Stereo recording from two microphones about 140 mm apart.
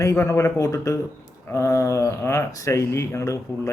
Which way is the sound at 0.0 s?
20° left (ahead or behind).